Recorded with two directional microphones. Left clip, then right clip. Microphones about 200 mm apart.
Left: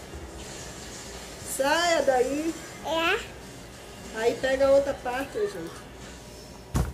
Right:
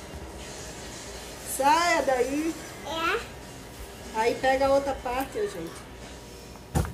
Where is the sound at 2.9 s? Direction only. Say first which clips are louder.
Left 3 dB; 45° left (ahead or behind).